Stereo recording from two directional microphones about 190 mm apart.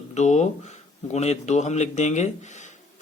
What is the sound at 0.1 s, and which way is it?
A man's voice, 35° left (ahead or behind).